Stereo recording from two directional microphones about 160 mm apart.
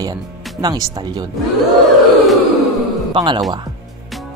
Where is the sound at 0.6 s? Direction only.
25° right (ahead or behind).